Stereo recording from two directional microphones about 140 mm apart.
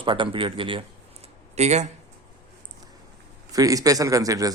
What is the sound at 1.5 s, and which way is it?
Speech, 50° right (ahead or behind).